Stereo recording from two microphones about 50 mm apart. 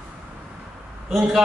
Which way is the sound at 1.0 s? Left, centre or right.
Centre.